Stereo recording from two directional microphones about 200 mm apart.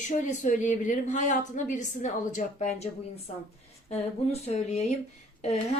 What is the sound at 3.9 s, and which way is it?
A woman's voice, 30° left (ahead or behind).